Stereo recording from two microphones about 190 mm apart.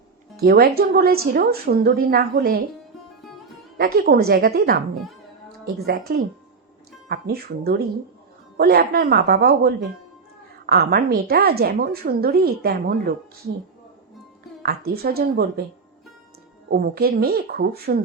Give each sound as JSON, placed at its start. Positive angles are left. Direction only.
{"t": 0.3, "sound": "a woman's voice", "side_deg": -55}
{"t": 3.8, "sound": "a woman's voice", "side_deg": -55}
{"t": 5.8, "sound": "a woman's voice", "side_deg": -60}
{"t": 14.6, "sound": "a woman's voice", "side_deg": -55}
{"t": 16.6, "sound": "a woman's voice", "side_deg": -55}